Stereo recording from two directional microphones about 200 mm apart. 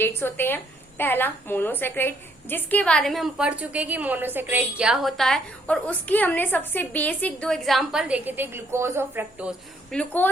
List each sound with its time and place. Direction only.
0.0 s a woman's voice: 10° left (ahead or behind); by 9.6 s 10° right (ahead or behind)
9.9 s a woman's voice: 5° left (ahead or behind)